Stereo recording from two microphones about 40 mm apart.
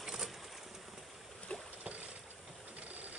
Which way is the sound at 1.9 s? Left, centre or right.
Right.